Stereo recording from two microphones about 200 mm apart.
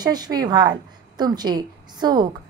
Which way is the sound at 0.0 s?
20° right (ahead or behind).